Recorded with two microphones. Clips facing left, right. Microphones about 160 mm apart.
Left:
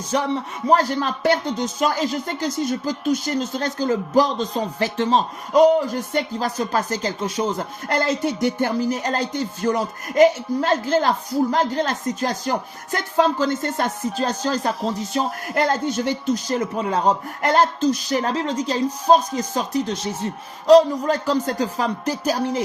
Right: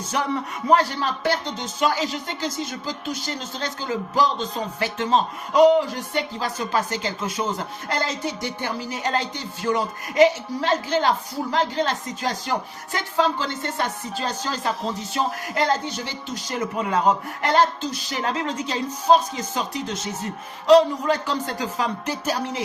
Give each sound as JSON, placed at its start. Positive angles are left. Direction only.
{"t": 0.1, "sound": "speech", "side_deg": 35}
{"t": 7.9, "sound": "music", "side_deg": 55}
{"t": 8.4, "sound": "speech", "side_deg": 45}
{"t": 15.5, "sound": "speech", "side_deg": 50}
{"t": 17.4, "sound": "speech", "side_deg": 45}